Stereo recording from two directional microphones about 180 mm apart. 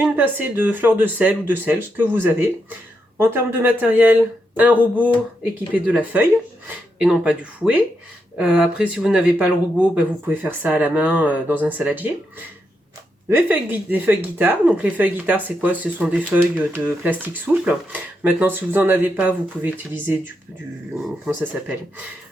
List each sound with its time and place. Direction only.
0.0 s speech: 10° right (ahead or behind)
13.2 s speech: 10° right (ahead or behind)